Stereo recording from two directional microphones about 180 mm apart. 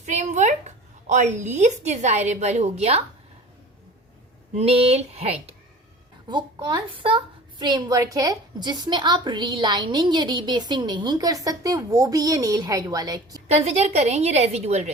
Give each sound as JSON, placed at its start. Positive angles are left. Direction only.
{"t": 0.0, "sound": "a sound", "side_deg": -40}
{"t": 1.0, "sound": "a woman's voice", "side_deg": -40}
{"t": 4.5, "sound": "a woman's voice", "side_deg": -35}
{"t": 6.2, "sound": "a woman's voice", "side_deg": -25}
{"t": 13.5, "sound": "a woman's voice", "side_deg": -40}